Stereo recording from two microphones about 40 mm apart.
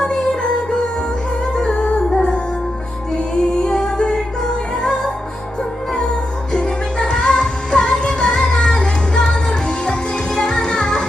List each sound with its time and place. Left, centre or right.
0.0 s music: centre
3.1 s music: centre
6.5 s music: left